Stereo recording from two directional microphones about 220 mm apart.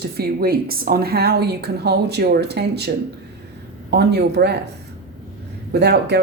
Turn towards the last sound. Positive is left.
turn(degrees=-50)  # may be behind; listen again after turning